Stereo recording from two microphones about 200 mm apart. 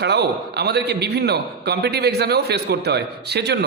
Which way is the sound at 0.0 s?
55° right (ahead or behind).